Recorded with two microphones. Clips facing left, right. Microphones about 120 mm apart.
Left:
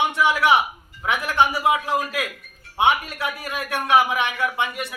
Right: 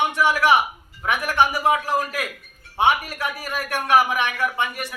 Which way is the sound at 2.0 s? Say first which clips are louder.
Left 1 dB; 5° right (ahead or behind).